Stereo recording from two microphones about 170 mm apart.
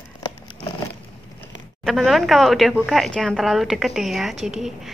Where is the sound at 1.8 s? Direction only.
Centre (ahead or behind).